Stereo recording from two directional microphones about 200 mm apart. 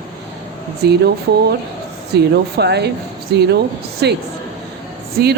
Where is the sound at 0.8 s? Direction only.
55° right (ahead or behind).